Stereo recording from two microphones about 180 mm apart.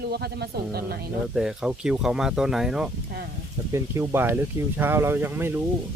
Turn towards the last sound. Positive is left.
turn(degrees=-10)  # may be behind; listen again after turning